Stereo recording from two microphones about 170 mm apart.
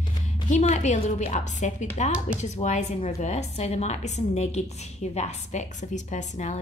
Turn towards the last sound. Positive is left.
turn(degrees=45)  # may be behind; listen again after turning